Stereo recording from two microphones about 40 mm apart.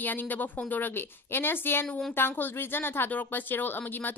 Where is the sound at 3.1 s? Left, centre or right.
Left.